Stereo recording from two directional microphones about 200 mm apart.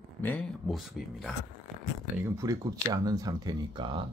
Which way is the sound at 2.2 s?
15° right (ahead or behind).